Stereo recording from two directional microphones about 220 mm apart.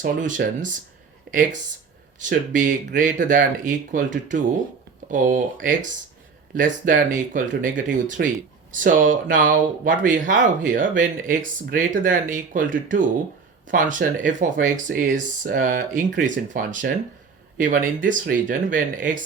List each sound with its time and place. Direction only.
0.0 s speech: 35° right (ahead or behind)
2.1 s speech: 35° right (ahead or behind)
5.1 s speech: 35° right (ahead or behind)